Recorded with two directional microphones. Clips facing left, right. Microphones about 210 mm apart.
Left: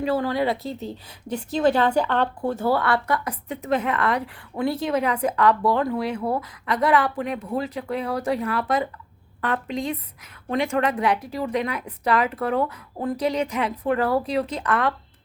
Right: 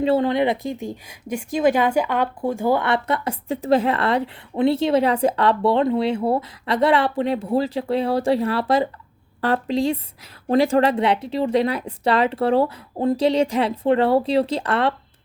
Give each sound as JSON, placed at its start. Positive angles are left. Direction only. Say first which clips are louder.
{"t": 0.0, "sound": "speech", "louder": "right 4 dB", "side_deg": -25}